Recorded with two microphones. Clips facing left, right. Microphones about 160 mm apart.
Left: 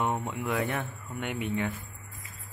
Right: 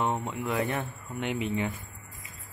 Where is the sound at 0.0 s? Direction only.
5° left (ahead or behind).